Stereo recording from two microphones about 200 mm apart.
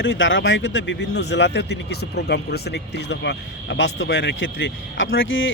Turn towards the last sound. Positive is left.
turn(degrees=75)  # may be behind; listen again after turning